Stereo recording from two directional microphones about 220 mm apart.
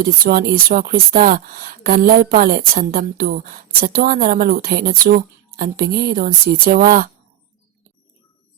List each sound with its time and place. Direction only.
0.0 s speech: 40° right (ahead or behind)